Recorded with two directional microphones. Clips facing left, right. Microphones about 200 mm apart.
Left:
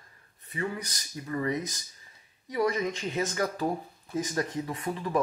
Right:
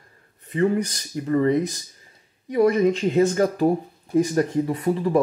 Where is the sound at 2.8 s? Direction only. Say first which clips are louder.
Right 12 dB; 55° right (ahead or behind).